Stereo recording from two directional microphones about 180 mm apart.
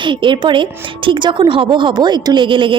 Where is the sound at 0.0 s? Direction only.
25° right (ahead or behind).